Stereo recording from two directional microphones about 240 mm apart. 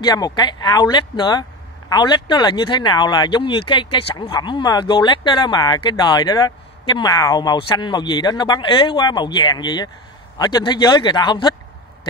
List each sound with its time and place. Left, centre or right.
0.0 s speech: centre